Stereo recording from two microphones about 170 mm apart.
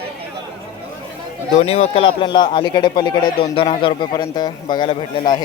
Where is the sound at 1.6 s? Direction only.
40° left (ahead or behind).